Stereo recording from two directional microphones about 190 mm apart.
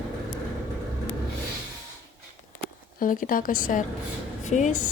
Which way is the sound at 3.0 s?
45° left (ahead or behind).